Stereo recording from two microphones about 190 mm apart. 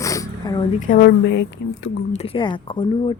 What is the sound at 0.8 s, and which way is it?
Speech, 45° left (ahead or behind).